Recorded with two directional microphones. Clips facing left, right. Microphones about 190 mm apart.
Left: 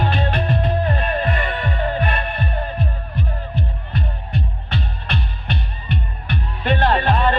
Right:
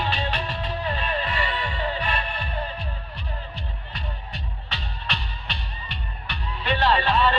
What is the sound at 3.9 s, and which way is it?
Music, 55° left (ahead or behind).